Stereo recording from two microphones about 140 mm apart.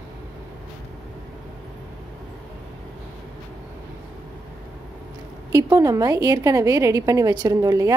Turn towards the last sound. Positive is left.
turn(degrees=-25)  # may be behind; listen again after turning